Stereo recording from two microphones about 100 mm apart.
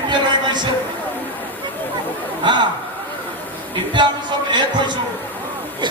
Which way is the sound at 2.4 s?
50° right (ahead or behind).